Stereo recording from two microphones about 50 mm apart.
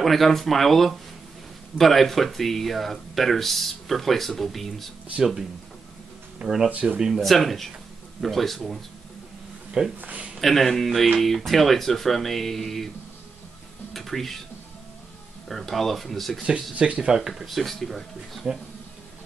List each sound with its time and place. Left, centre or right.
0.0 s speech: centre
6.4 s speech: centre
6.7 s speech: right
7.0 s speech: centre
7.2 s speech: centre
9.9 s speech: right
10.4 s speech: centre
13.9 s speech: centre
15.4 s speech: centre
16.7 s speech: right
17.3 s speech: centre